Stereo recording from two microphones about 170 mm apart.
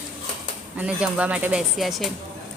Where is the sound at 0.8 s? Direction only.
10° right (ahead or behind).